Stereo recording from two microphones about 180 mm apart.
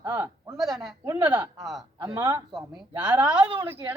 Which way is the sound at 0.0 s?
10° right (ahead or behind).